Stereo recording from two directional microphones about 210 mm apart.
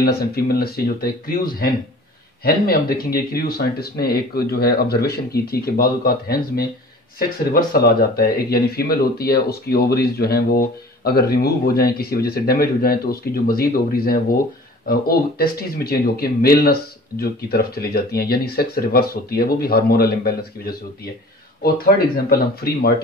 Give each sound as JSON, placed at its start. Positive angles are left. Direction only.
{"t": 0.0, "sound": "speech", "side_deg": 45}
{"t": 21.7, "sound": "speech", "side_deg": 45}